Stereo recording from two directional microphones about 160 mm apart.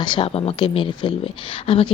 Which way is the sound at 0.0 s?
30° left (ahead or behind).